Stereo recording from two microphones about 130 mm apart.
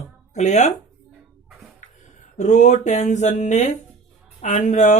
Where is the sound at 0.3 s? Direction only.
60° left (ahead or behind).